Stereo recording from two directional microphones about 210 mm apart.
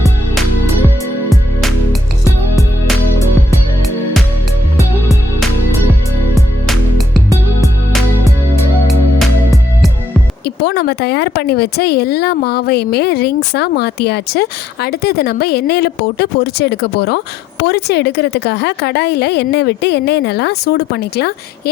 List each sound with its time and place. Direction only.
1.3 s music: centre (ahead or behind)
6.3 s music: centre (ahead or behind)
10.4 s speech: 50° left (ahead or behind)